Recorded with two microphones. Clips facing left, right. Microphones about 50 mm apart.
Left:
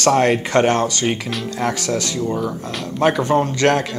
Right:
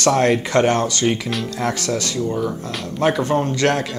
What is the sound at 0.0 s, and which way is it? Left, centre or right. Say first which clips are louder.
Speech: left 1 dB; left.